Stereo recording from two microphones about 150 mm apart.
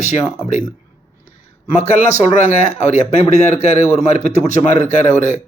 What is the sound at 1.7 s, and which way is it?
Speech, 50° left (ahead or behind).